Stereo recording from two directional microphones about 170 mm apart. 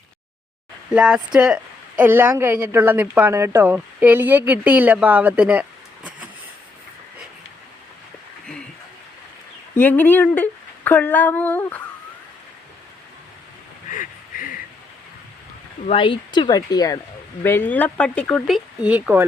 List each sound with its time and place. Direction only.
0.9 s a woman's voice: 5° right (ahead or behind)
9.7 s speech: 10° left (ahead or behind)
13.9 s a sound: 55° left (ahead or behind)
15.9 s speech: 30° left (ahead or behind); by 19.2 s 10° right (ahead or behind)